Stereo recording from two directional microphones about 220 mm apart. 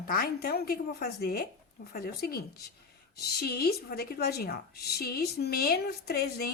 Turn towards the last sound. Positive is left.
turn(degrees=45)  # may be behind; listen again after turning